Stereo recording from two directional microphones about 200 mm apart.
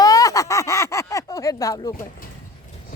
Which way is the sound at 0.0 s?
15° left (ahead or behind).